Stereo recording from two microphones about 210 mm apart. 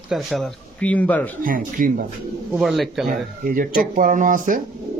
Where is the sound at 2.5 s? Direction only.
Centre (ahead or behind).